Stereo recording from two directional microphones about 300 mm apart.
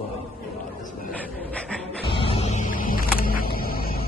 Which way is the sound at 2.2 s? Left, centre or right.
Centre.